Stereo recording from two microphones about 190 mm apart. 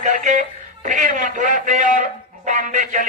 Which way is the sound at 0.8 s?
40° right (ahead or behind).